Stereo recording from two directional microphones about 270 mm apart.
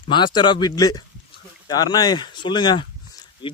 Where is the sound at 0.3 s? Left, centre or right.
Centre.